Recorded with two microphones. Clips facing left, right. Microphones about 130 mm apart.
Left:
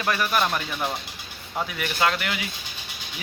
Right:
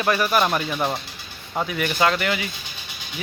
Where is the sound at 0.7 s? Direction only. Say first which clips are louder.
Right 4 dB; 30° right (ahead or behind).